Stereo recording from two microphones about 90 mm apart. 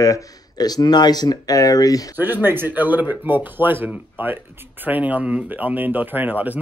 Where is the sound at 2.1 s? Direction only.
20° right (ahead or behind).